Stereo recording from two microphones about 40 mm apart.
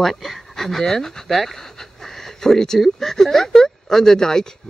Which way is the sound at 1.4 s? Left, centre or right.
Centre.